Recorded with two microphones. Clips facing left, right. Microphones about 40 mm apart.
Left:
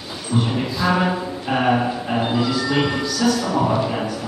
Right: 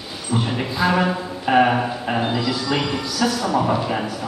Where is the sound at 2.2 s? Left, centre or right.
Centre.